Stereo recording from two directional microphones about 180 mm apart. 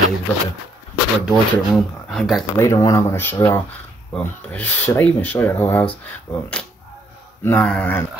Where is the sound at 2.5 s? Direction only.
15° left (ahead or behind).